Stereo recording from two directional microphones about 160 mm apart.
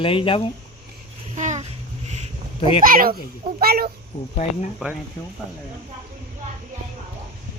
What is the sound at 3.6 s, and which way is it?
Speech, 70° right (ahead or behind).